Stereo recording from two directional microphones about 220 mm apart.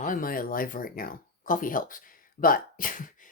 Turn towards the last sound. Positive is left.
turn(degrees=40)  # may be behind; listen again after turning